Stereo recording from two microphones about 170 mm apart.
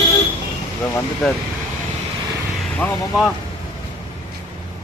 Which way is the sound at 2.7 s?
10° left (ahead or behind).